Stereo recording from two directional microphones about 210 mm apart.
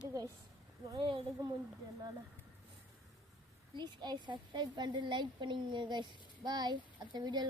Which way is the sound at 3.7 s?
20° right (ahead or behind).